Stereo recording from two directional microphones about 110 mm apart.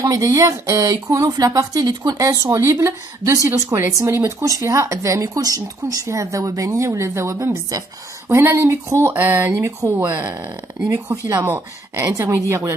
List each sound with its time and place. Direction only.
0.0 s speech: 30° right (ahead or behind); by 9.6 s 15° right (ahead or behind)
9.6 s speech: 30° right (ahead or behind)
10.0 s speech: 15° right (ahead or behind)